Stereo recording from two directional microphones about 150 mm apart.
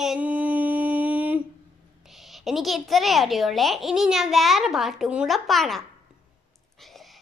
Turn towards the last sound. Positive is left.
turn(degrees=0)  # may be behind; listen again after turning